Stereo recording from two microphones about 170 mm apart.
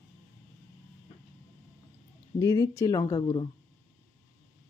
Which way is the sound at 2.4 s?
20° left (ahead or behind).